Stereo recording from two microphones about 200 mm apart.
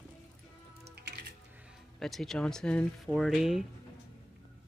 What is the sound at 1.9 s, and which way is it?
Speech, centre (ahead or behind).